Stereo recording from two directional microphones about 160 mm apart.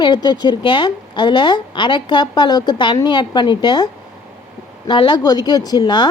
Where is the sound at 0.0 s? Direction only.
30° left (ahead or behind).